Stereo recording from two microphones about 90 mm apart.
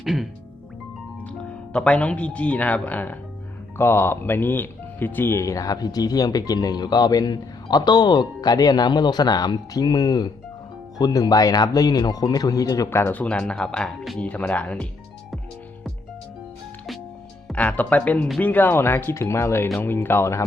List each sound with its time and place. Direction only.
0.0 s speech: centre (ahead or behind)
1.3 s speech: 10° left (ahead or behind); by 12.9 s 40° left (ahead or behind)
12.9 s speech: 30° left (ahead or behind)
13.1 s speech: 10° left (ahead or behind)
17.5 s speech: 15° left (ahead or behind)